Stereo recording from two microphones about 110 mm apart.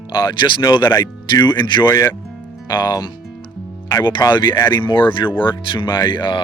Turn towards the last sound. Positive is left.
turn(degrees=45)  # may be behind; listen again after turning